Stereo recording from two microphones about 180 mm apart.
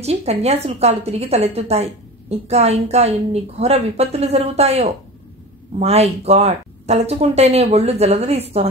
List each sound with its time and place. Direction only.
0.0 s a woman's voice: 35° right (ahead or behind)